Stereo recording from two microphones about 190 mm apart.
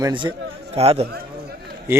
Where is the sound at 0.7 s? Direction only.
35° right (ahead or behind).